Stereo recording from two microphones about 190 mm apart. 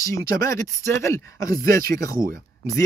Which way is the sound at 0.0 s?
15° left (ahead or behind).